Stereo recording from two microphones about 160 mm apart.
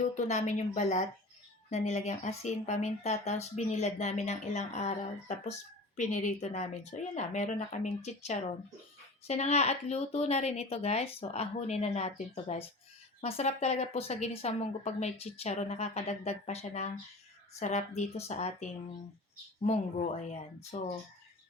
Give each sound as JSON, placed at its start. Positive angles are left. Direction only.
{"t": 0.0, "sound": "speech", "side_deg": 50}
{"t": 6.0, "sound": "speech", "side_deg": 50}
{"t": 20.3, "sound": "speech", "side_deg": 45}